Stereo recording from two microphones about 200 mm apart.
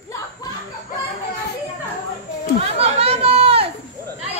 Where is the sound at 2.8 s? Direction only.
30° right (ahead or behind).